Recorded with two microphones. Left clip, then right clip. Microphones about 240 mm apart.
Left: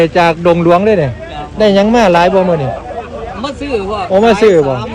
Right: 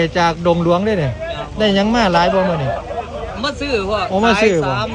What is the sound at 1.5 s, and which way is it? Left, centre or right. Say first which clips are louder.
Speech: left 7 dB; centre.